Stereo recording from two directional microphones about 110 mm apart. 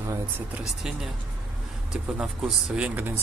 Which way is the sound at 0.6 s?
5° right (ahead or behind).